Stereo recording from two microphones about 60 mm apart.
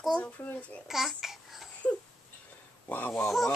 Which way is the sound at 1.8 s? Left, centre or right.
Left.